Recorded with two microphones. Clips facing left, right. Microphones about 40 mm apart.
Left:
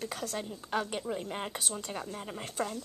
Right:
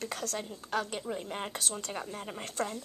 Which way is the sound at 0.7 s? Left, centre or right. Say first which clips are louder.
Even; centre.